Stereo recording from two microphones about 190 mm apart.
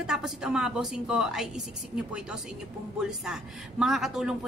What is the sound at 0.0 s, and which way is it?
A woman's voice, 5° right (ahead or behind).